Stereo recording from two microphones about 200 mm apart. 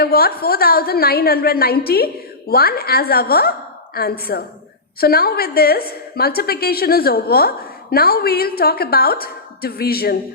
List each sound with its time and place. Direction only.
0.0 s a woman's voice: 50° left (ahead or behind)